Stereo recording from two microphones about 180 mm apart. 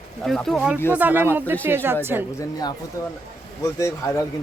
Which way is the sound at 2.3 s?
20° left (ahead or behind).